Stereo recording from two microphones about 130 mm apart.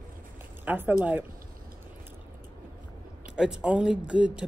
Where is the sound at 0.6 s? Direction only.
15° right (ahead or behind).